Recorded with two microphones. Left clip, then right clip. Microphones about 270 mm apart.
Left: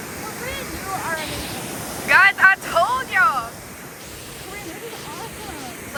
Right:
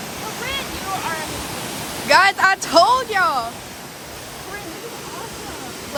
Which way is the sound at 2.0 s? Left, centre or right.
Centre.